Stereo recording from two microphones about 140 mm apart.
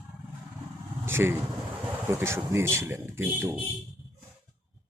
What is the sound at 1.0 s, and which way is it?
A man's voice, 15° right (ahead or behind).